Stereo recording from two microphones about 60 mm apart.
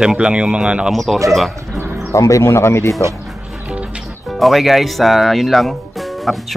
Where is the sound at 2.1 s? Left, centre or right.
Left.